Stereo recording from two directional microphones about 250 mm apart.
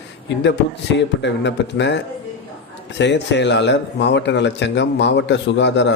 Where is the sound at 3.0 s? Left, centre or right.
Left.